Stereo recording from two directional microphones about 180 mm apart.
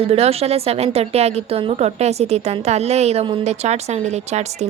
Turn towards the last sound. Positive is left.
turn(degrees=-35)  # may be behind; listen again after turning